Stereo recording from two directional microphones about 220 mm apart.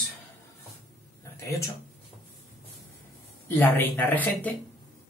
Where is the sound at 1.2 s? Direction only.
15° left (ahead or behind).